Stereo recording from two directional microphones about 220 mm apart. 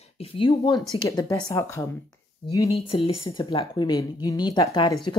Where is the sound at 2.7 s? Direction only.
25° left (ahead or behind).